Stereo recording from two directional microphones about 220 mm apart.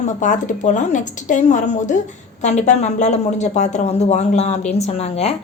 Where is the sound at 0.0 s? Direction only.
35° left (ahead or behind).